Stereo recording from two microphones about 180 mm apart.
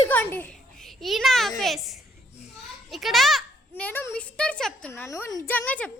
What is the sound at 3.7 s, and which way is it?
A child's voice, 10° left (ahead or behind).